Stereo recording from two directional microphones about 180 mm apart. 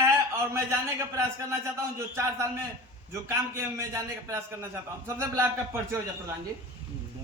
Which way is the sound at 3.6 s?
15° right (ahead or behind).